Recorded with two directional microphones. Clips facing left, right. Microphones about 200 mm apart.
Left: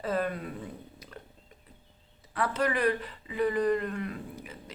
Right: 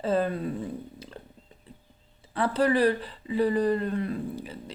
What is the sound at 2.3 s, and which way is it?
Speech, 30° right (ahead or behind).